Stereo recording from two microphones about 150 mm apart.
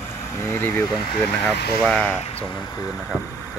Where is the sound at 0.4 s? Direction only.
15° left (ahead or behind).